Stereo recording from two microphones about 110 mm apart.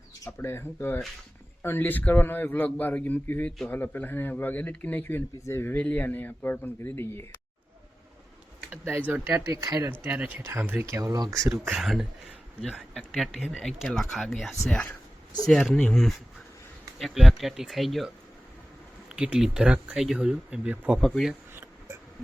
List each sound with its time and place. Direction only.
0.3 s speech: 20° left (ahead or behind)
8.7 s speech: 15° right (ahead or behind)
9.2 s speech: 30° right (ahead or behind)
10.0 s speech: 15° right (ahead or behind)
10.9 s speech: 35° right (ahead or behind)
11.4 s speech: 5° right (ahead or behind)
21.0 s speech: centre (ahead or behind)